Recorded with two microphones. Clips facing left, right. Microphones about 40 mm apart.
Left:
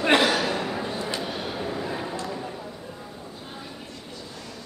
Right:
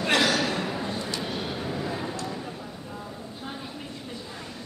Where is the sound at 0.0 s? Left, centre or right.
Left.